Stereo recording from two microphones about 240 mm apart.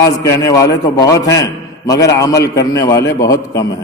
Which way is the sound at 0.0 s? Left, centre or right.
Centre.